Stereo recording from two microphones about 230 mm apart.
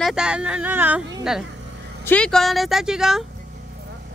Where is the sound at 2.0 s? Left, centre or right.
Centre.